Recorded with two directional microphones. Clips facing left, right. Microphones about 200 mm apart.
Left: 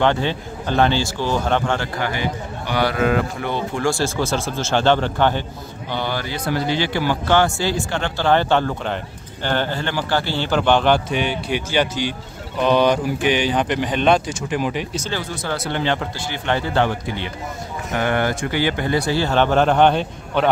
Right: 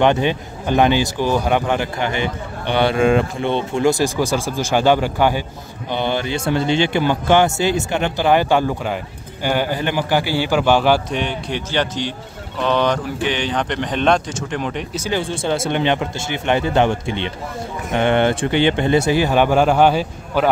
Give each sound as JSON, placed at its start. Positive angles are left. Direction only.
{"t": 0.0, "sound": "speech", "side_deg": -15}
{"t": 5.9, "sound": "speech", "side_deg": -20}
{"t": 11.1, "sound": "speech", "side_deg": 5}
{"t": 15.0, "sound": "speech", "side_deg": -15}
{"t": 15.2, "sound": "speech", "side_deg": -25}